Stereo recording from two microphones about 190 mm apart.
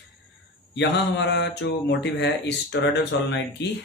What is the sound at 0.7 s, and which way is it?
Speech, 65° left (ahead or behind).